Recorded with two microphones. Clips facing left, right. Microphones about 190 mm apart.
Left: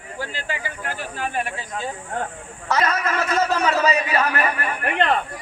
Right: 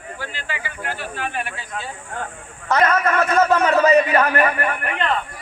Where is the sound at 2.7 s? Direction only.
55° right (ahead or behind).